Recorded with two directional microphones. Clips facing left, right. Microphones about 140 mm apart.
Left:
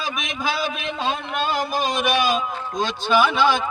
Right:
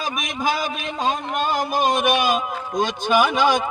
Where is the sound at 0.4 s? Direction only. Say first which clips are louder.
Right 1 dB; 45° right (ahead or behind).